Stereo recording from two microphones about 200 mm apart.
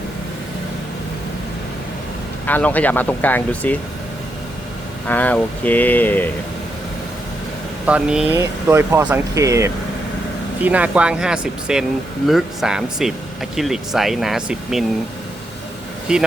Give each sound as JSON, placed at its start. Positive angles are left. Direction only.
{"t": 2.5, "sound": "speech", "side_deg": 5}
{"t": 5.0, "sound": "speech", "side_deg": 10}
{"t": 7.9, "sound": "speech", "side_deg": -5}
{"t": 16.1, "sound": "speech", "side_deg": -5}